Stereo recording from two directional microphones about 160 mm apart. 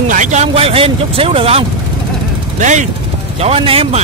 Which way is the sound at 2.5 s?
50° right (ahead or behind).